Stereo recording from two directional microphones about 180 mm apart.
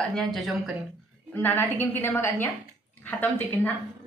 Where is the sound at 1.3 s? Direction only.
10° left (ahead or behind).